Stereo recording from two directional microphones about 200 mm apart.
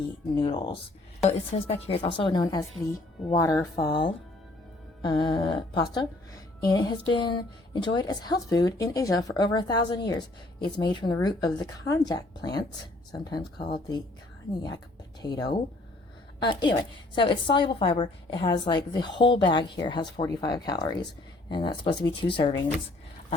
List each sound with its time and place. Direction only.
0.3 s a woman's voice: 25° left (ahead or behind)
5.0 s a woman's voice: 20° left (ahead or behind)
15.2 s a woman's voice: 20° left (ahead or behind)